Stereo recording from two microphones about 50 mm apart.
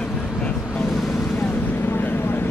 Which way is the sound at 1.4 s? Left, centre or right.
Left.